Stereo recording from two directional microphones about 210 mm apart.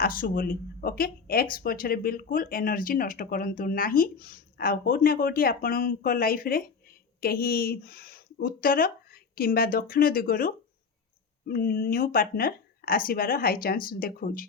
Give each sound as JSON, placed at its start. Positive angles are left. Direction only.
{"t": 0.0, "sound": "speech", "side_deg": 45}